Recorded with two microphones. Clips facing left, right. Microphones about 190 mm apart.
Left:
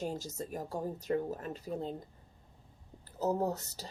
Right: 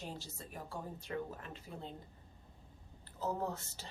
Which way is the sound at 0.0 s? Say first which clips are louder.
Left 9 dB; 45° left (ahead or behind).